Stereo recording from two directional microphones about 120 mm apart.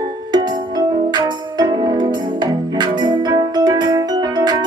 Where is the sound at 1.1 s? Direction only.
35° right (ahead or behind).